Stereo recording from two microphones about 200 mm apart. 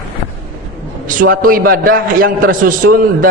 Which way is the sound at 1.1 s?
45° right (ahead or behind).